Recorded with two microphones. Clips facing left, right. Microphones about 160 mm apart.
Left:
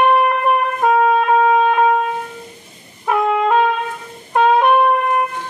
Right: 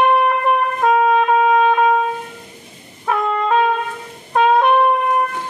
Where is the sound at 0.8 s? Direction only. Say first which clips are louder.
Even; 5° left (ahead or behind).